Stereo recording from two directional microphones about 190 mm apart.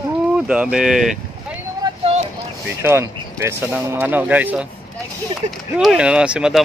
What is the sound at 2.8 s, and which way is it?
Speech, 15° right (ahead or behind).